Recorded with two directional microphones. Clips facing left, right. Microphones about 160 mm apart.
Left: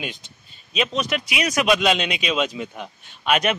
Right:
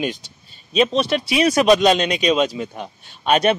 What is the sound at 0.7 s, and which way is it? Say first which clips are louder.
Speech: right 6 dB; 30° right (ahead or behind).